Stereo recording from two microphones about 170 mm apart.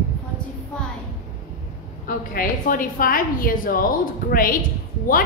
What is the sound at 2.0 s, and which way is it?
A woman's voice, 55° left (ahead or behind).